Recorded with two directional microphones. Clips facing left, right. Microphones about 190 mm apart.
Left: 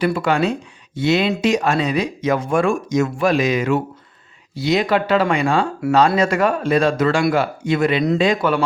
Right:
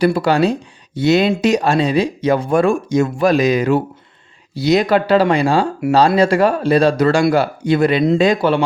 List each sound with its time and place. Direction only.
0.0 s speech: 35° right (ahead or behind)